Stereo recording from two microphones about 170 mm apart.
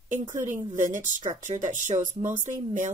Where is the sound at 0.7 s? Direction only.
50° right (ahead or behind).